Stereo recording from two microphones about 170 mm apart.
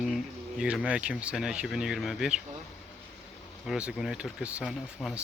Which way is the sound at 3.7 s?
5° right (ahead or behind).